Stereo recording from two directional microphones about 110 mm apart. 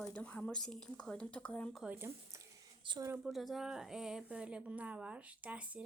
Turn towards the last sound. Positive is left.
turn(degrees=-15)  # may be behind; listen again after turning